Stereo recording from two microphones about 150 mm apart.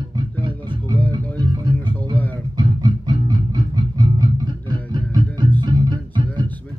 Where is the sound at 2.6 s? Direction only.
30° right (ahead or behind).